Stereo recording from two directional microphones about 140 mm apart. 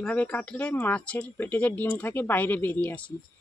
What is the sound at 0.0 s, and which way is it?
Speech, 10° left (ahead or behind).